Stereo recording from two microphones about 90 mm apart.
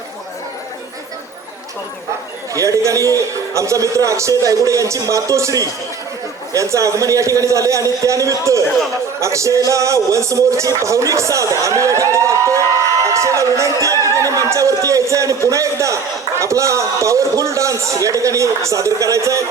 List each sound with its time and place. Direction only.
2.6 s speech: 35° right (ahead or behind)